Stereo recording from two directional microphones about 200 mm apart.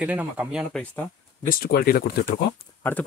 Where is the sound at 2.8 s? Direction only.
10° left (ahead or behind).